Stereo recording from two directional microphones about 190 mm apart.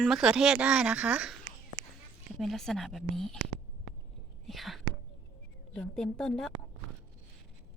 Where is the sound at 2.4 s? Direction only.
Centre (ahead or behind).